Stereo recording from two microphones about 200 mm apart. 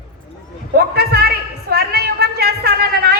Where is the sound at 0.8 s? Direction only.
50° right (ahead or behind).